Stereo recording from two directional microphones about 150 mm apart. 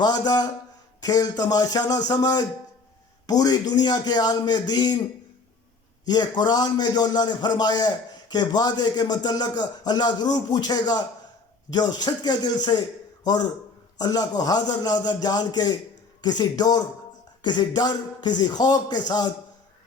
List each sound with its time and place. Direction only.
0.0 s a man's voice: 25° left (ahead or behind)
6.1 s a man's voice: 30° left (ahead or behind)